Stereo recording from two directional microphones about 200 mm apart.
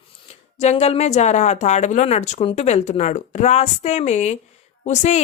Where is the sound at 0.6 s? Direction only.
30° left (ahead or behind).